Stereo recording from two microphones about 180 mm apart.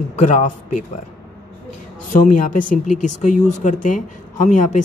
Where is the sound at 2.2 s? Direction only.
45° left (ahead or behind).